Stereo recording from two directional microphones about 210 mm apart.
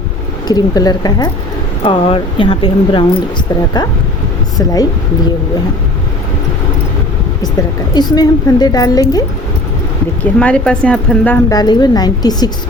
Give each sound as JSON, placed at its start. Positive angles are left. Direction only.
{"t": 0.4, "sound": "a woman's voice", "side_deg": 20}
{"t": 7.9, "sound": "a woman's voice", "side_deg": 20}
{"t": 10.4, "sound": "a woman's voice", "side_deg": 5}